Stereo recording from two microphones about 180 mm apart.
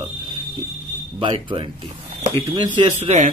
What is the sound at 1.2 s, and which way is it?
Speech, 30° right (ahead or behind).